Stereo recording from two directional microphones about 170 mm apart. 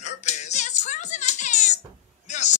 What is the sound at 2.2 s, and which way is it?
Basketball bounce, 45° left (ahead or behind).